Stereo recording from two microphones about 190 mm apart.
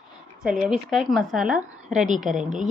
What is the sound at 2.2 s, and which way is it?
Speech, 40° right (ahead or behind).